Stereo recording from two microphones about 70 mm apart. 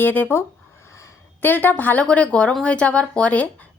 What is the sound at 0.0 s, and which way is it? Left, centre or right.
Speech, left.